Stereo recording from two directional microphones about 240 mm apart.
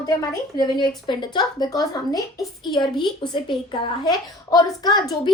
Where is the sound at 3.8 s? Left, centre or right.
Centre.